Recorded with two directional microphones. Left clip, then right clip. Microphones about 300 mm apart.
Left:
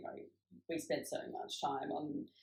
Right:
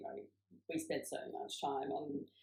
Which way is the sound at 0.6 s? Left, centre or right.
Centre.